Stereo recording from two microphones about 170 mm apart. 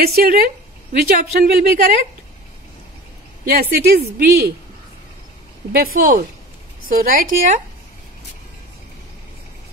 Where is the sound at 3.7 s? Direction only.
65° right (ahead or behind).